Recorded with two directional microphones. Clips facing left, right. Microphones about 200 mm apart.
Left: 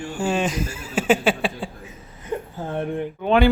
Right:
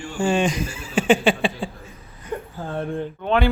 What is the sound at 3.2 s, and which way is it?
Speech, 10° left (ahead or behind).